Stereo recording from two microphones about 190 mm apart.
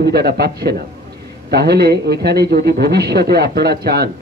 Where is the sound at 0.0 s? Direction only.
55° right (ahead or behind).